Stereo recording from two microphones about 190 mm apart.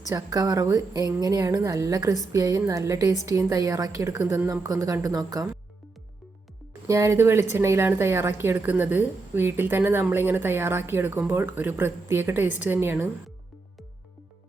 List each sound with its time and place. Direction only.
0.1 s a woman's voice: 20° right (ahead or behind)
6.8 s a woman's voice: 15° right (ahead or behind)